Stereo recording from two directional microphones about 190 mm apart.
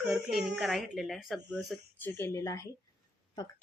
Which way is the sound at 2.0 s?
10° left (ahead or behind).